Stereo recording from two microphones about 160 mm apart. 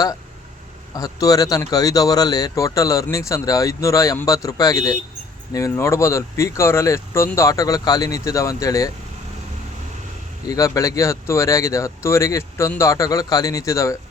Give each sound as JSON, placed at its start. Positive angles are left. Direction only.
{"t": 0.9, "sound": "speech", "side_deg": 20}
{"t": 10.4, "sound": "speech", "side_deg": 20}